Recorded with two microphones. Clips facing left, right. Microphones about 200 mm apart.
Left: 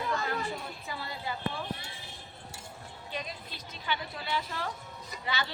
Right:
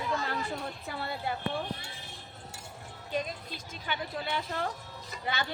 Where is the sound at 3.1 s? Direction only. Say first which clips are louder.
Right 6 dB; 45° right (ahead or behind).